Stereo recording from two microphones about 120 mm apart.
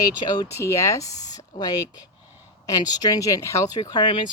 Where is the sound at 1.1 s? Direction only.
75° left (ahead or behind).